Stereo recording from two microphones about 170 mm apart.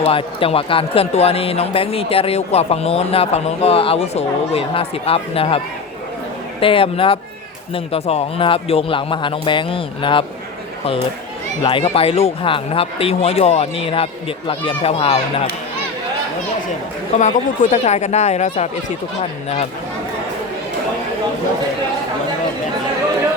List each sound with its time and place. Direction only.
0.0 s speech: 30° left (ahead or behind)
11.6 s speech: 30° left (ahead or behind)
17.2 s speech: 45° left (ahead or behind)